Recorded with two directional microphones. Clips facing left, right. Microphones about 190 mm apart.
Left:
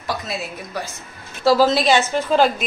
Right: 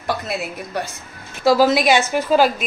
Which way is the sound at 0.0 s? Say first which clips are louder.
Right 3 dB; 60° right (ahead or behind).